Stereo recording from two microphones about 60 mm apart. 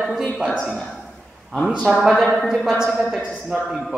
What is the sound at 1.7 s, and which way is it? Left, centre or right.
A man's voice, centre.